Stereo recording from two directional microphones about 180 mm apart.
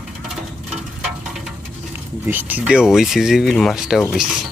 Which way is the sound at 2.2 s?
10° right (ahead or behind).